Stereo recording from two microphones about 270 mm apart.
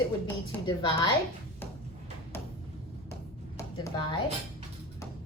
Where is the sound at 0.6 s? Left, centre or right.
Centre.